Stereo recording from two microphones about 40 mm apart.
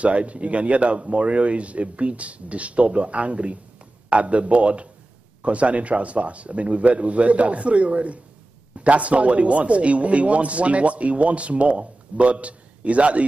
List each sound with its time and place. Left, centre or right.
0.0 s a man's voice: right